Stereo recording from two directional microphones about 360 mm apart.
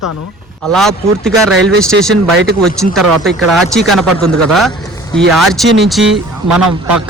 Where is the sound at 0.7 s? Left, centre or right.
Centre.